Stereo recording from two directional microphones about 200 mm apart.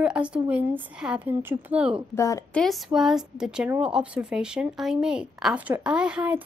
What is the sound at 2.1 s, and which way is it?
Speech, 15° left (ahead or behind).